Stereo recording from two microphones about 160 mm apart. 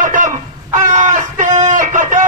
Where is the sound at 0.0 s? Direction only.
55° right (ahead or behind).